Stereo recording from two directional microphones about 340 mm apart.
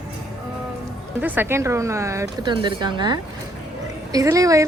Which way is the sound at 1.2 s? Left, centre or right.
Centre.